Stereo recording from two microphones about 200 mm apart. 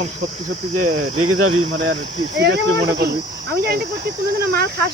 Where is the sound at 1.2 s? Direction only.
90° right.